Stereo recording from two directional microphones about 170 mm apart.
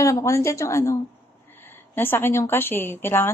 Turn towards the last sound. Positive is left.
turn(degrees=15)  # may be behind; listen again after turning